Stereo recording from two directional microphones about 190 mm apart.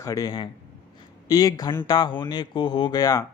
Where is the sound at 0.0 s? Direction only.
15° left (ahead or behind).